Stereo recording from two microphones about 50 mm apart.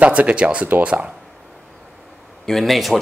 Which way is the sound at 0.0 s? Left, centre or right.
Right.